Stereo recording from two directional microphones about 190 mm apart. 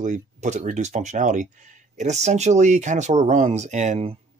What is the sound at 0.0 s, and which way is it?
Speech, 40° right (ahead or behind).